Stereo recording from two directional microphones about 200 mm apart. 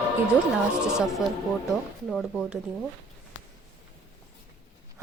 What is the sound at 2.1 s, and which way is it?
Speech, centre (ahead or behind).